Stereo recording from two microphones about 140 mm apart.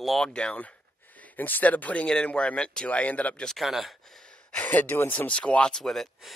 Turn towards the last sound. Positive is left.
turn(degrees=0)  # may be behind; listen again after turning